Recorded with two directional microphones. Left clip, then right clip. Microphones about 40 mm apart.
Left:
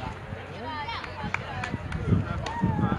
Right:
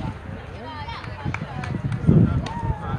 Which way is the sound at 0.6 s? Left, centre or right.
Left.